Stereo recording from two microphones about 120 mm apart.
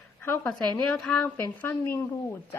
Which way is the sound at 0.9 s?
5° left (ahead or behind).